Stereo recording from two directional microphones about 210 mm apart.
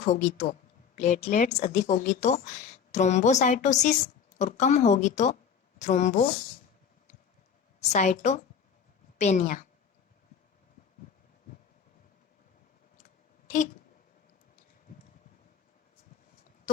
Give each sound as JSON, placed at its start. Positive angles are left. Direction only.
{"t": 0.0, "sound": "speech", "side_deg": 35}
{"t": 7.9, "sound": "speech", "side_deg": 35}
{"t": 13.5, "sound": "a sound", "side_deg": 35}